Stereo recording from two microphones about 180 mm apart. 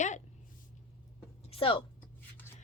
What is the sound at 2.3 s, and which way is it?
Rub, 10° left (ahead or behind).